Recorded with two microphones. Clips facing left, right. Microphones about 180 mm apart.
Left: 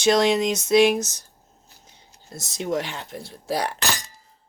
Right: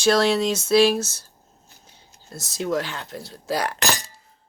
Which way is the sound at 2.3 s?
20° left (ahead or behind).